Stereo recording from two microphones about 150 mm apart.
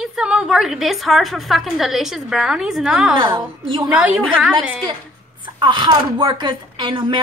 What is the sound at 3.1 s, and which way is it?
Speech, 35° right (ahead or behind).